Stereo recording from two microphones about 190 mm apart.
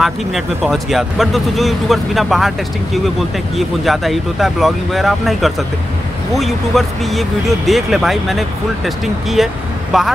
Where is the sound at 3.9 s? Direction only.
Centre (ahead or behind).